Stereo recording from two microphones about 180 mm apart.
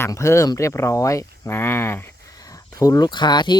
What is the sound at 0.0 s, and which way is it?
Speech, 15° left (ahead or behind).